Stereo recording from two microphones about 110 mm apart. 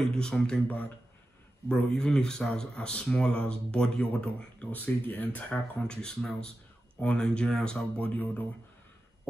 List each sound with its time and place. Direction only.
0.1 s speech: 5° left (ahead or behind)